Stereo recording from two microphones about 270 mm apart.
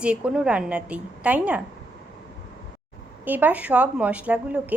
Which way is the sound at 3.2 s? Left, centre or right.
Centre.